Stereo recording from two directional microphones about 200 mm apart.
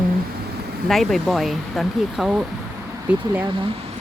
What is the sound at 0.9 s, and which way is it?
Speech, centre (ahead or behind).